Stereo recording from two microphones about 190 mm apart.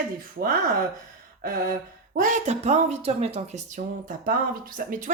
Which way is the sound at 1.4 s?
50° right (ahead or behind).